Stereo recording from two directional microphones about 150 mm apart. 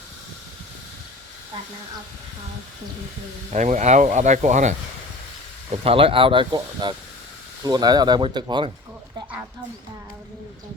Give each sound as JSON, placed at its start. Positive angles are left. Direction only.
{"t": 3.5, "sound": "speech", "side_deg": -55}
{"t": 5.8, "sound": "speech", "side_deg": -40}